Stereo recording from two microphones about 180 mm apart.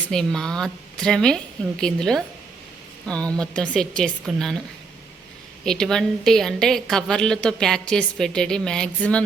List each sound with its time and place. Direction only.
0.1 s a woman's voice: 5° left (ahead or behind)
3.4 s a woman's voice: 5° left (ahead or behind)
5.6 s a woman's voice: 5° left (ahead or behind)